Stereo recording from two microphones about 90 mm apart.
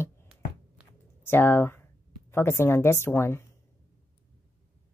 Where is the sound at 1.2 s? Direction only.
25° left (ahead or behind).